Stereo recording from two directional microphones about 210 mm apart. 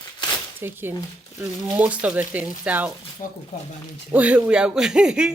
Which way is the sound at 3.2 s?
40° left (ahead or behind).